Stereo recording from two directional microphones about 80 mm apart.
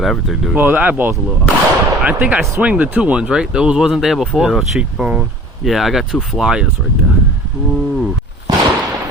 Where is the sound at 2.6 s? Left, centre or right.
Centre.